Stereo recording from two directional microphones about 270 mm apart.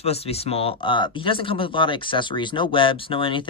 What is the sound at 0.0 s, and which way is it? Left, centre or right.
Speech, left.